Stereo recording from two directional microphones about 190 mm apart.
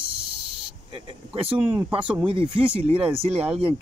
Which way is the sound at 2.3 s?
30° right (ahead or behind).